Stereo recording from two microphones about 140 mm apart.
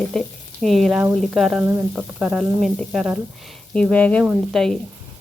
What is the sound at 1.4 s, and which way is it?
Speech, centre (ahead or behind).